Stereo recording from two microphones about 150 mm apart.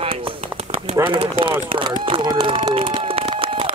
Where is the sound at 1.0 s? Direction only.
35° right (ahead or behind).